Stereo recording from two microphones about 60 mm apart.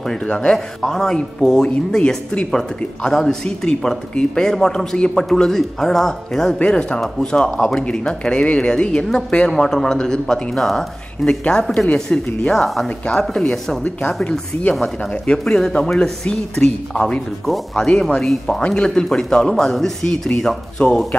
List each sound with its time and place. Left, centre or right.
0.0 s speech: centre
9.6 s speech: centre
11.9 s speech: centre
12.6 s speech: centre